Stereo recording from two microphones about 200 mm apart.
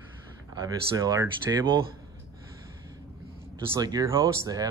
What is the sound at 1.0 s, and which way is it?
Speech, 15° right (ahead or behind).